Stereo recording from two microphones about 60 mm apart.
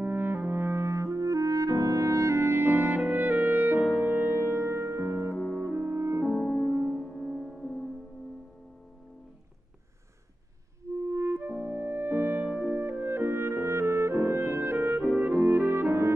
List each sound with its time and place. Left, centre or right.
0.0 s clarinet: right
4.0 s music: right
5.3 s music: centre
5.6 s music: right
5.9 s music: right
6.2 s music: centre
7.5 s music: centre
11.0 s music: right
12.5 s clarinet: right
15.1 s music: right